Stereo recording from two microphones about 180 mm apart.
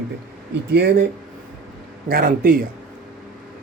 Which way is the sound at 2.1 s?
55° right (ahead or behind).